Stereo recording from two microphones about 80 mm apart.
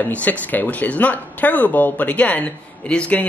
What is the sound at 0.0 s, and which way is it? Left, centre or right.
Speech, centre.